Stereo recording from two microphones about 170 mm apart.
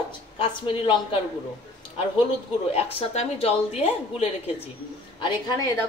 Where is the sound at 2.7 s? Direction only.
40° left (ahead or behind).